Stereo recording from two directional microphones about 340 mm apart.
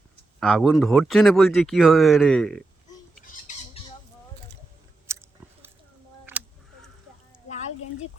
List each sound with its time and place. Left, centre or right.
0.3 s speech: centre
3.5 s squawk: left
5.1 s biting: centre
6.3 s a sound: centre